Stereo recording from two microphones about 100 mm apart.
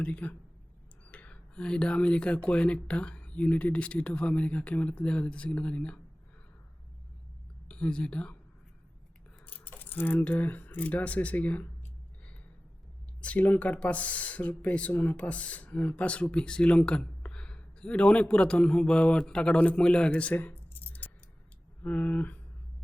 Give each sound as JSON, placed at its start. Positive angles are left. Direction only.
{"t": 0.0, "sound": "speech", "side_deg": 15}
{"t": 7.7, "sound": "speech", "side_deg": 10}
{"t": 9.5, "sound": "speech", "side_deg": 20}
{"t": 13.2, "sound": "speech", "side_deg": 15}